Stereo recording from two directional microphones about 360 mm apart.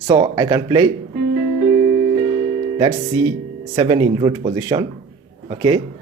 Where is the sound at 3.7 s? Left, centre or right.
Centre.